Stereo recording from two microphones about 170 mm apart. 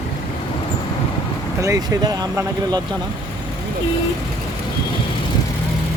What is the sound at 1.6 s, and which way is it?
Speech, 20° right (ahead or behind).